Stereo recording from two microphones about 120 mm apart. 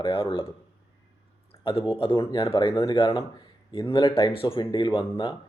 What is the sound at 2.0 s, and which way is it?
Speech, 45° left (ahead or behind).